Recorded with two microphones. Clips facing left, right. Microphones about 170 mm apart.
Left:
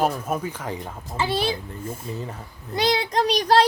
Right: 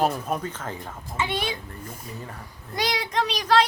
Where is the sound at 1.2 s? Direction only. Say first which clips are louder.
Left 4 dB; 35° left (ahead or behind).